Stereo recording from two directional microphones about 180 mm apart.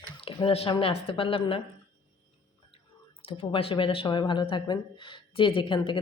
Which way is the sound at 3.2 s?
30° left (ahead or behind).